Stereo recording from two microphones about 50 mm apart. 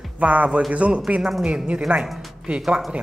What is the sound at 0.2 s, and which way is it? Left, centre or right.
Speech, right.